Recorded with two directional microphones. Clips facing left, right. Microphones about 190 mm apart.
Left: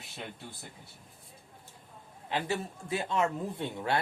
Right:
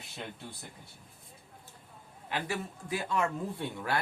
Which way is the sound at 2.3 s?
25° left (ahead or behind).